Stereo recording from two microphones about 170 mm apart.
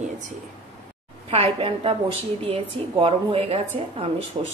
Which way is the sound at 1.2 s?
30° right (ahead or behind).